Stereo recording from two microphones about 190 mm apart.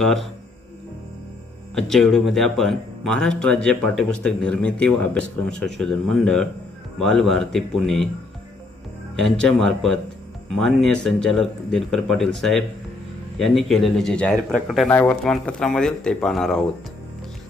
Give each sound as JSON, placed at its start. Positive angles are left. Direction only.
{"t": 0.0, "sound": "speech", "side_deg": 0}
{"t": 1.8, "sound": "speech", "side_deg": 0}
{"t": 9.1, "sound": "speech", "side_deg": 5}